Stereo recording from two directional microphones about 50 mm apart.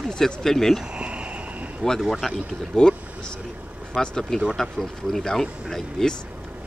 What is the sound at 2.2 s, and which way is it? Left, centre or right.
Speech, centre.